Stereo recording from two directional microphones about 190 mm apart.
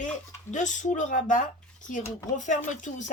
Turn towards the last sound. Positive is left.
turn(degrees=40)  # may be behind; listen again after turning